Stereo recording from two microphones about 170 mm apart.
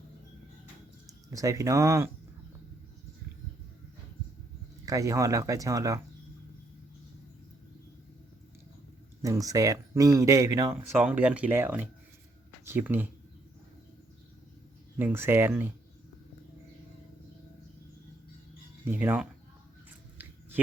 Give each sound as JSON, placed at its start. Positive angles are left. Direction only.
{"t": 1.3, "sound": "speech", "side_deg": -20}
{"t": 4.9, "sound": "speech", "side_deg": -20}
{"t": 9.2, "sound": "speech", "side_deg": -20}
{"t": 14.9, "sound": "speech", "side_deg": -15}
{"t": 18.9, "sound": "speech", "side_deg": -10}